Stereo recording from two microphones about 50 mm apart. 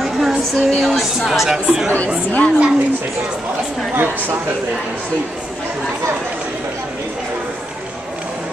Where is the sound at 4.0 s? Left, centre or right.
Right.